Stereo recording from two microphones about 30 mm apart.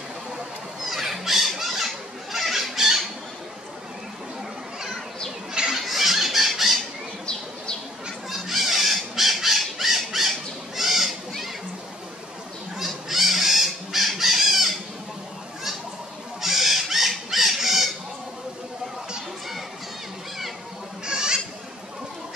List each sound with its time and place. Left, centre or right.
0.8 s squawk: centre
2.3 s chicken: centre
5.5 s a sound: right
5.8 s a sound: centre
8.3 s squawk: centre
10.8 s a sound: centre
12.7 s chicken: centre
16.3 s owl: centre
17.3 s chicken: centre
21.0 s bleat: right